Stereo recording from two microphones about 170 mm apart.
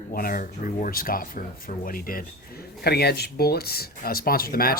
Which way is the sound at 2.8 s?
70° left (ahead or behind).